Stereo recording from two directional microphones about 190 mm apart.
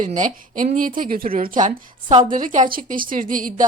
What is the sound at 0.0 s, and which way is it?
A woman's voice, 45° right (ahead or behind).